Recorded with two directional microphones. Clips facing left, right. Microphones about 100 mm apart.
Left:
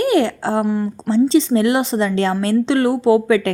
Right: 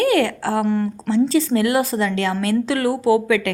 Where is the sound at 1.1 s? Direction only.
25° left (ahead or behind).